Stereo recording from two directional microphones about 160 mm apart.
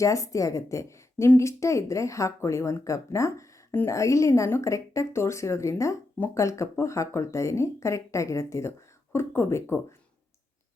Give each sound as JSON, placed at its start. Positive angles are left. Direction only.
{"t": 0.0, "sound": "speech", "side_deg": 20}